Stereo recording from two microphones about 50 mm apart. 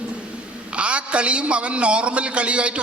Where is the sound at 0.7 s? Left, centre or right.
Right.